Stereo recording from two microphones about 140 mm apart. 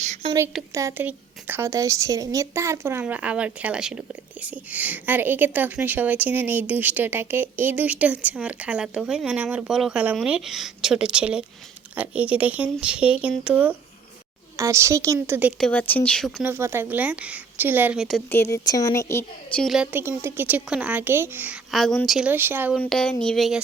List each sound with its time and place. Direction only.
0.0 s a sound: 55° right (ahead or behind)
0.7 s a woman's voice: 20° right (ahead or behind)
15.5 s speech: 5° left (ahead or behind)
16.4 s speech: 15° right (ahead or behind)
18.3 s speech: 20° left (ahead or behind)
19.5 s speech: 5° left (ahead or behind)
19.9 s speech: 15° right (ahead or behind)
21.7 s speech: centre (ahead or behind)
22.3 s speech: 15° right (ahead or behind)
22.8 s speech: 5° left (ahead or behind)